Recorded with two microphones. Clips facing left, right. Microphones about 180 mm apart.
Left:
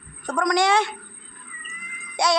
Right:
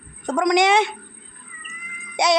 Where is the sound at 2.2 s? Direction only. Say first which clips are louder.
Right 3 dB; 20° right (ahead or behind).